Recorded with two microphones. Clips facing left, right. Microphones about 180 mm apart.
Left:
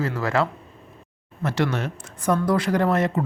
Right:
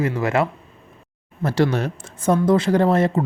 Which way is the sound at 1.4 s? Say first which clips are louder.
Right 4 dB; 35° right (ahead or behind).